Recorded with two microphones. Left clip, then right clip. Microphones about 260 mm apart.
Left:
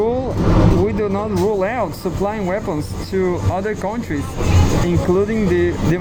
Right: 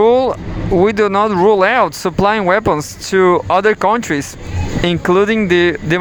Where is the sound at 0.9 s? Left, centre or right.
Right.